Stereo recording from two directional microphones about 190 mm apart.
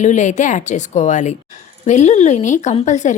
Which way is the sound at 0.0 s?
40° left (ahead or behind).